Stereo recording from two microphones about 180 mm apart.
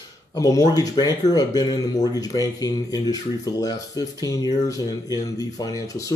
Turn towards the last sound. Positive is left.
turn(degrees=20)  # may be behind; listen again after turning